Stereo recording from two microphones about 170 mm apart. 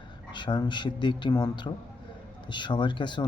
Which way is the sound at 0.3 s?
25° left (ahead or behind).